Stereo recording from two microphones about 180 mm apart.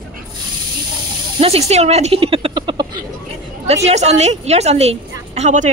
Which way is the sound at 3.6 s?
35° right (ahead or behind).